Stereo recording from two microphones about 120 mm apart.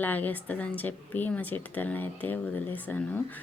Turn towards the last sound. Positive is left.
turn(degrees=15)  # may be behind; listen again after turning